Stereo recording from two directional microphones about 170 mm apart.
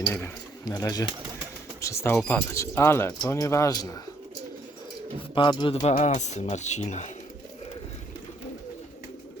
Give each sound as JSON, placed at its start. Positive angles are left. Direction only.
{"t": 0.1, "sound": "speech", "side_deg": 15}
{"t": 5.3, "sound": "speech", "side_deg": 25}
{"t": 5.8, "sound": "speech", "side_deg": 45}